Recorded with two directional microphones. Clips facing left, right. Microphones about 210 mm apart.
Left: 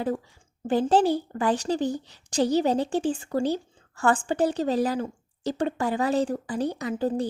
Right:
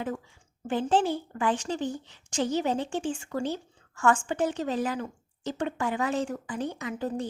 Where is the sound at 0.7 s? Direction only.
40° left (ahead or behind).